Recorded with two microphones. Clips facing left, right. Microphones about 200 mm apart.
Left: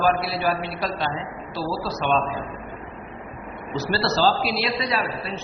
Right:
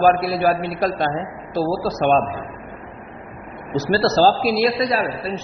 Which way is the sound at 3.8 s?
45° right (ahead or behind).